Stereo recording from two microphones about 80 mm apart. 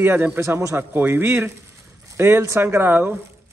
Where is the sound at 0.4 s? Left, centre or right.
Right.